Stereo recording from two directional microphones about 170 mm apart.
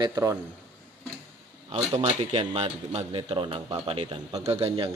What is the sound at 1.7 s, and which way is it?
A man's voice, 35° right (ahead or behind).